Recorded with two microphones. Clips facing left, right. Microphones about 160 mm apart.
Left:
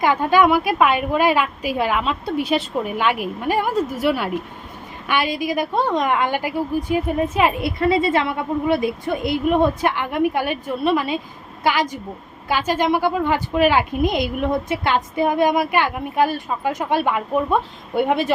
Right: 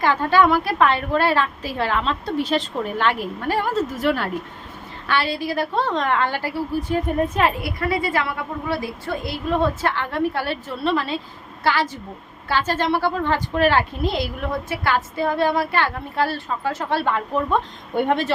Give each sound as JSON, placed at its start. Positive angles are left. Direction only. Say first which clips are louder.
{"t": 0.0, "sound": "a woman's voice", "louder": "left 1 dB", "side_deg": 15}
{"t": 7.6, "sound": "a woman's voice", "louder": "left 5 dB", "side_deg": 25}